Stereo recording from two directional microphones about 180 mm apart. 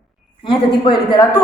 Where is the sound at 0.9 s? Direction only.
25° left (ahead or behind).